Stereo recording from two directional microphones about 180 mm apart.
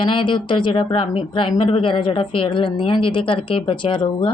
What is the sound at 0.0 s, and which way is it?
A woman's voice, 25° left (ahead or behind).